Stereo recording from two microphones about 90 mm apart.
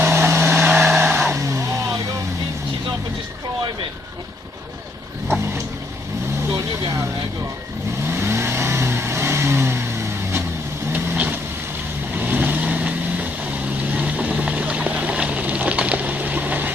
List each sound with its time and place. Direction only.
0.0 s vehicle: 25° right (ahead or behind)
0.7 s vehicle: centre (ahead or behind)
1.3 s vehicle: 35° right (ahead or behind)
8.0 s vehicle: 30° right (ahead or behind)
13.9 s a sound: 20° right (ahead or behind)